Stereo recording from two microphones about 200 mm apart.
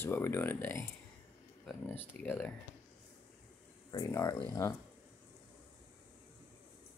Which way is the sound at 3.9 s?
15° left (ahead or behind).